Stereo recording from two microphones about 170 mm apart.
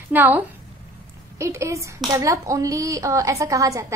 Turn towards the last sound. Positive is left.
turn(degrees=-20)  # may be behind; listen again after turning